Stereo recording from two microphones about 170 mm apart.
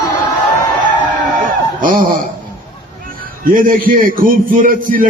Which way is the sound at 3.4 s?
55° right (ahead or behind).